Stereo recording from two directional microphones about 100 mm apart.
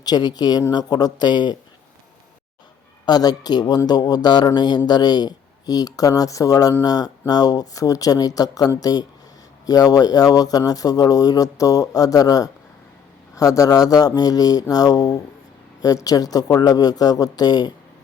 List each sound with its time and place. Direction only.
0.0 s speech: 45° left (ahead or behind)
3.1 s speech: 40° left (ahead or behind)